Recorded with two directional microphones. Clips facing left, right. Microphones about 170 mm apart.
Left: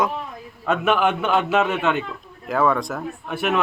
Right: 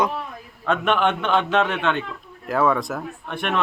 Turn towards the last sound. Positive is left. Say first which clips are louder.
# left 3 dB
turn(degrees=5)  # may be behind; listen again after turning